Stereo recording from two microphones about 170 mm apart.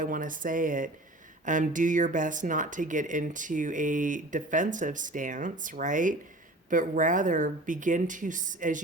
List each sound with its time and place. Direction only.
0.0 s speech: 50° right (ahead or behind)